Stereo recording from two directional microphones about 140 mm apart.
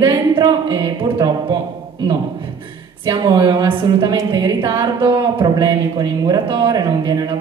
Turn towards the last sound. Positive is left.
turn(degrees=-30)  # may be behind; listen again after turning